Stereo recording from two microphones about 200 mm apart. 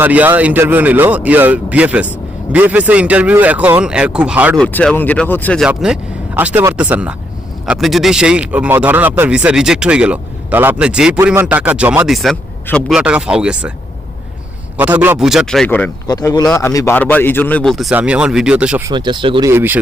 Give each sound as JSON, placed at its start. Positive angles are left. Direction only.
{"t": 0.0, "sound": "speech", "side_deg": -10}
{"t": 4.5, "sound": "a man's voice", "side_deg": 5}
{"t": 5.6, "sound": "speech", "side_deg": -5}
{"t": 14.8, "sound": "speech", "side_deg": -10}
{"t": 16.0, "sound": "a man's voice", "side_deg": 20}
{"t": 18.9, "sound": "speech", "side_deg": -25}
{"t": 19.5, "sound": "speech", "side_deg": -10}